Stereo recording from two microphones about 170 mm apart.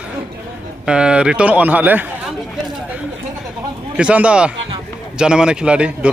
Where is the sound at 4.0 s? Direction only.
5° right (ahead or behind).